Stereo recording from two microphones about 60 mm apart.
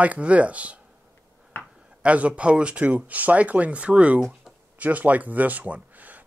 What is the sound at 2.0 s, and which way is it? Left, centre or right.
Speech, right.